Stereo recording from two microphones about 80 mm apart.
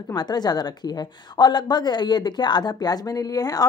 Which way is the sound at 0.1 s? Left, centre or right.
Left.